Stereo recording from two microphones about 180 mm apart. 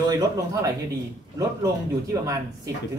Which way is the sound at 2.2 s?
20° right (ahead or behind).